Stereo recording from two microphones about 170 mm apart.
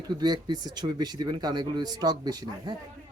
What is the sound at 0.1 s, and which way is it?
Speech, 25° right (ahead or behind).